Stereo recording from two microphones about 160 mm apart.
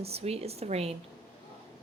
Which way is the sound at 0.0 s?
40° right (ahead or behind).